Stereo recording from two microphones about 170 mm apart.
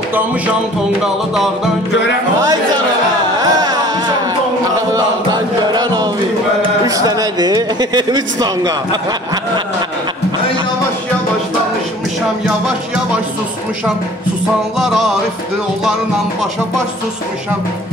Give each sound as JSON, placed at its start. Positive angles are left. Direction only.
{"t": 1.3, "sound": "music", "side_deg": 0}
{"t": 3.3, "sound": "carnatic music", "side_deg": -20}
{"t": 4.9, "sound": "chant", "side_deg": -25}
{"t": 6.9, "sound": "speech", "side_deg": -20}
{"t": 12.4, "sound": "music", "side_deg": -5}
{"t": 14.8, "sound": "music", "side_deg": 0}